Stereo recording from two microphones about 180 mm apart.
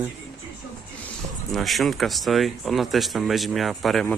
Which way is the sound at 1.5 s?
Centre (ahead or behind).